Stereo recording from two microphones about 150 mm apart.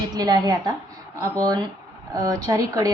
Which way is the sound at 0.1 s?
25° right (ahead or behind).